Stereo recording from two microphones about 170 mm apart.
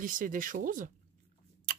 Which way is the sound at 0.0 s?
50° right (ahead or behind).